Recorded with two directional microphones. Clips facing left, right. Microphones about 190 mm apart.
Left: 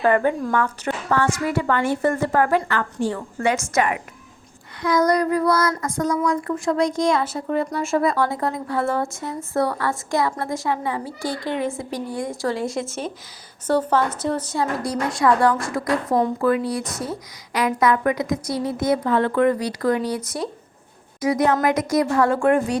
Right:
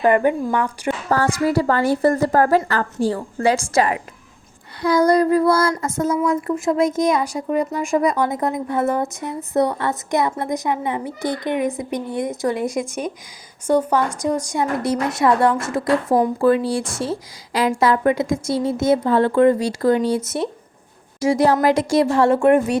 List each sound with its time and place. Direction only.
0.0 s speech: 15° right (ahead or behind)
1.1 s a woman's voice: 35° right (ahead or behind)